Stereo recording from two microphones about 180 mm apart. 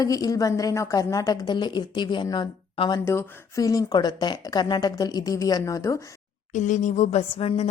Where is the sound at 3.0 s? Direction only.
15° left (ahead or behind).